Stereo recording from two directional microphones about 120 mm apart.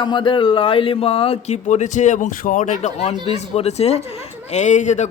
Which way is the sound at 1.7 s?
85° left.